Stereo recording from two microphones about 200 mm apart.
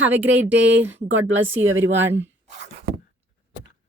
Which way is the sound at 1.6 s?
75° right (ahead or behind).